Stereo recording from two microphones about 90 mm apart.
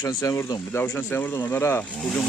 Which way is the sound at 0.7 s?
25° left (ahead or behind).